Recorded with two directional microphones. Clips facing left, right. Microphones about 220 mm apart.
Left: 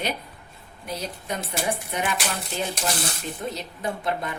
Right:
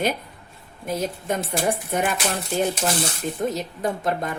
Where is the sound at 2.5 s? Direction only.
45° right (ahead or behind).